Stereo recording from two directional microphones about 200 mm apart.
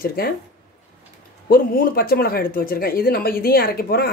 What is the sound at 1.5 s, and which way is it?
Speech, 45° left (ahead or behind).